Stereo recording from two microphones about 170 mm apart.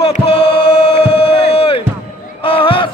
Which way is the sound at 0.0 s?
35° left (ahead or behind).